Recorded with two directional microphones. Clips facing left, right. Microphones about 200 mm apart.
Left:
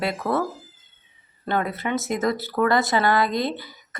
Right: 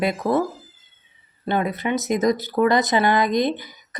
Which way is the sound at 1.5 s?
20° right (ahead or behind).